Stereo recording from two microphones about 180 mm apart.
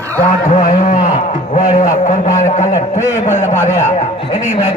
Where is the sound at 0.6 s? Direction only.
45° left (ahead or behind).